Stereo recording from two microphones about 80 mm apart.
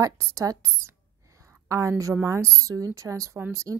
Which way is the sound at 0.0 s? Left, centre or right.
Right.